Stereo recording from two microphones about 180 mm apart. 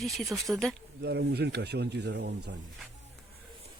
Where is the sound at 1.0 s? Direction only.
65° right (ahead or behind).